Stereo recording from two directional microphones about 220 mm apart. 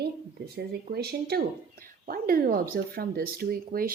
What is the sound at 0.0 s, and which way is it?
A woman's voice, 45° right (ahead or behind).